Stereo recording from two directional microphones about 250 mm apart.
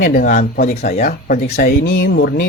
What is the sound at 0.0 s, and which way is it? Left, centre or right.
Speech, left.